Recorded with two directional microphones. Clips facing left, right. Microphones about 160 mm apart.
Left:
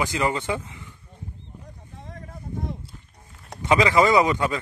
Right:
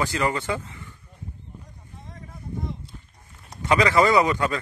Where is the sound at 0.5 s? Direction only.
15° left (ahead or behind).